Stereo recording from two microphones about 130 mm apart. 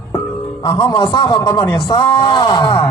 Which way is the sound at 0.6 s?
35° left (ahead or behind).